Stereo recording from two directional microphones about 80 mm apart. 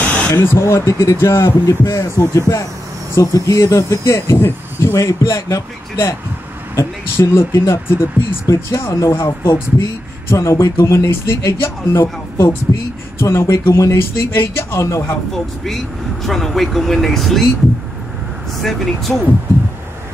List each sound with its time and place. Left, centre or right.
0.6 s speech: left
15.3 s speech: centre
18.6 s speech: centre